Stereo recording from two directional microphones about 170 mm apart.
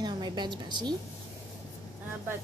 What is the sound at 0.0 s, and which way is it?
Speech, 25° right (ahead or behind).